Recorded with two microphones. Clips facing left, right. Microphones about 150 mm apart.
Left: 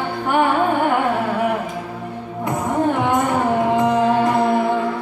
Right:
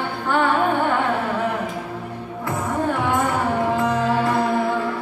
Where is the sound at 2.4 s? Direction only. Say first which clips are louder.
Left 4 dB; 20° left (ahead or behind).